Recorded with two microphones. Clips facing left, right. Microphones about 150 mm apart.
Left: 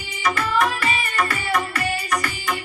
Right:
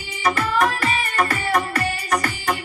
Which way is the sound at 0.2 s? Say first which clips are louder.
Right 1 dB; 30° right (ahead or behind).